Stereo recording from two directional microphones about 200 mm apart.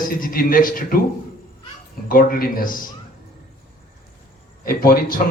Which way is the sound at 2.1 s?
45° left (ahead or behind).